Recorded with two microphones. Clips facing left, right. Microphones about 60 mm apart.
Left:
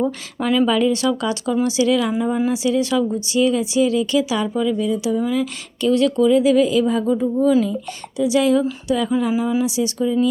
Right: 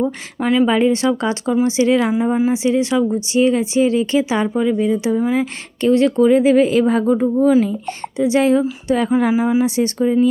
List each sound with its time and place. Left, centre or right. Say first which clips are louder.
0.3 s speech: right 2 dB; centre
0.7 s speech: right 2 dB; right
9.3 s speech: right 4 dB; right